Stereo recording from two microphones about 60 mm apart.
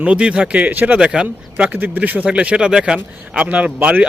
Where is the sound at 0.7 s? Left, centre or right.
Right.